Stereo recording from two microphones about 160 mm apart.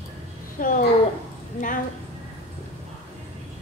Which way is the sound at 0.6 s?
55° left (ahead or behind).